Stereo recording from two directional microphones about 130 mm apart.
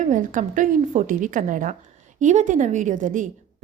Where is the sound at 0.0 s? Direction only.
80° right.